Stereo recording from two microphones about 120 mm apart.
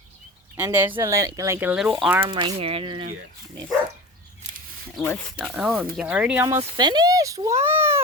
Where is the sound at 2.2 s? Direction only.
45° right (ahead or behind).